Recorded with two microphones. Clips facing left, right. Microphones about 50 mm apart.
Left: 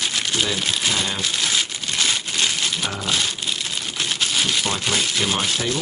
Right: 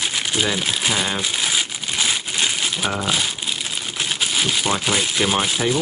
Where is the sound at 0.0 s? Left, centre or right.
Centre.